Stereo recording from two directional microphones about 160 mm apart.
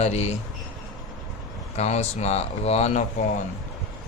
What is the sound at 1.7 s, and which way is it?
Speech, 45° left (ahead or behind).